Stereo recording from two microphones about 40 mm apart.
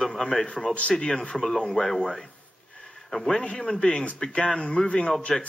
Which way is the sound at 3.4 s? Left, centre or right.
Left.